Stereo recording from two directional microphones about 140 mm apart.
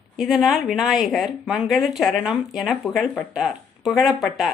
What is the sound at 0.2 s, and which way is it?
A woman's voice, centre (ahead or behind).